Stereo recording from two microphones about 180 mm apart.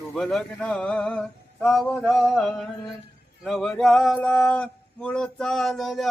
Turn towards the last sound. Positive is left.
turn(degrees=0)  # may be behind; listen again after turning